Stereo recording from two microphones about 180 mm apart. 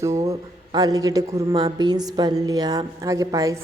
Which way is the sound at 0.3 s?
20° right (ahead or behind).